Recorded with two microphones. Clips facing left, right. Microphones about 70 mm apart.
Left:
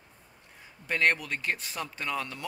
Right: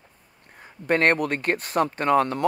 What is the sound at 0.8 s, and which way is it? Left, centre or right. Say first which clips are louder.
Speech: right 7 dB; right.